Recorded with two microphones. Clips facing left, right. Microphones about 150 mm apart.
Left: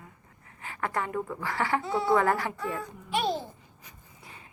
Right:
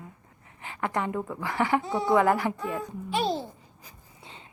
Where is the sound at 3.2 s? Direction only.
30° right (ahead or behind).